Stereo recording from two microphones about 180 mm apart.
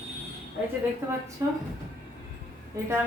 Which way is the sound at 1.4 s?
20° right (ahead or behind).